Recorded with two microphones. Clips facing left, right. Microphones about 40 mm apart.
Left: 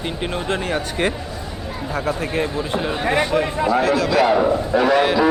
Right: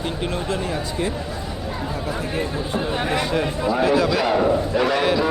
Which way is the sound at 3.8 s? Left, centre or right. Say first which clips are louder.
Even; centre.